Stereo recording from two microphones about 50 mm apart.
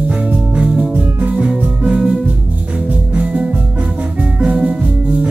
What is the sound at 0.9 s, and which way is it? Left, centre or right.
Music, right.